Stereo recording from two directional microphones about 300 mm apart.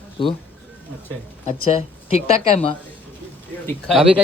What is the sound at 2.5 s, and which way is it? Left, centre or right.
Speech, centre.